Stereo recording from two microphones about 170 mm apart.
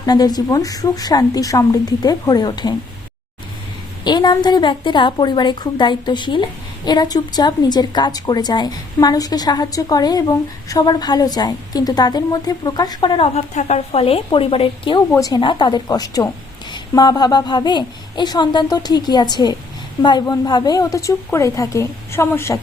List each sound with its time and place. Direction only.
0.0 s a woman's voice: 25° left (ahead or behind)
4.0 s a woman's voice: 25° left (ahead or behind)